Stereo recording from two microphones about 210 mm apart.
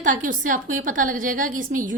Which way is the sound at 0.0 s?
40° right (ahead or behind).